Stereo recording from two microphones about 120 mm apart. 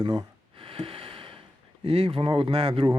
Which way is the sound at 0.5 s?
50° right (ahead or behind).